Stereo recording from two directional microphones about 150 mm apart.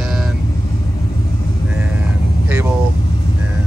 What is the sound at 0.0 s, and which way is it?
Vehicle, centre (ahead or behind).